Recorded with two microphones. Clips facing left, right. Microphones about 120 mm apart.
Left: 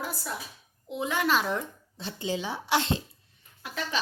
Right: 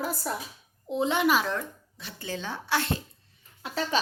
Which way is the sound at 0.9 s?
30° right (ahead or behind).